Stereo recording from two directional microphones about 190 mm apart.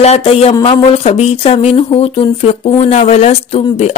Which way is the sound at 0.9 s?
30° left (ahead or behind).